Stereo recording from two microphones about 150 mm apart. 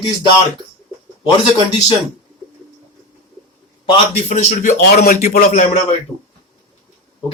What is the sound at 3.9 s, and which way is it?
Speech, 45° left (ahead or behind).